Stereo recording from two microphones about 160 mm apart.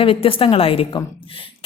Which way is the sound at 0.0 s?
35° left (ahead or behind).